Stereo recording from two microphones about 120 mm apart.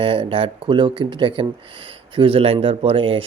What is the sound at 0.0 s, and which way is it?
Speech, 50° right (ahead or behind).